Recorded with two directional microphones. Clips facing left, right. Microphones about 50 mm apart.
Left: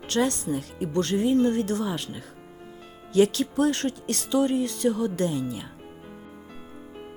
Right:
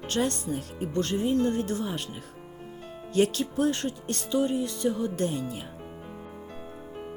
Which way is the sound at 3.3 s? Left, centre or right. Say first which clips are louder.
Left 3 dB; left.